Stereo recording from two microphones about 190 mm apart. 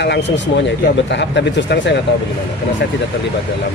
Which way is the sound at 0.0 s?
65° left (ahead or behind).